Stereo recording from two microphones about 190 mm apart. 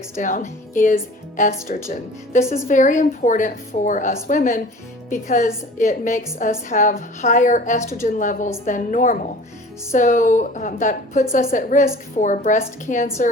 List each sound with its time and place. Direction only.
0.2 s a woman's voice: 40° left (ahead or behind)
7.8 s a woman's voice: 15° left (ahead or behind)
8.0 s a woman's voice: 45° left (ahead or behind)